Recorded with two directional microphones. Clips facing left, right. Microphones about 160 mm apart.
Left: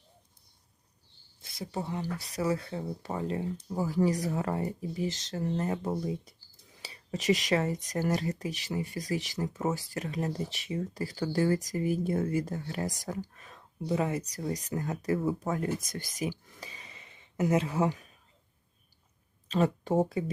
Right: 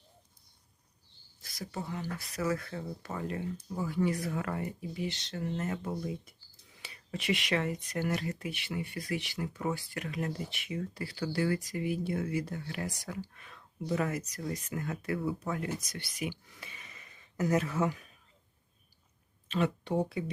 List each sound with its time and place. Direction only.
1.4 s a sound: 25° left (ahead or behind)
1.7 s speech: 30° left (ahead or behind); by 15.4 s 45° left (ahead or behind)
15.4 s speech: 35° left (ahead or behind)
15.8 s speech: 45° left (ahead or behind); by 17.9 s 30° left (ahead or behind)
19.5 s speech: 40° left (ahead or behind)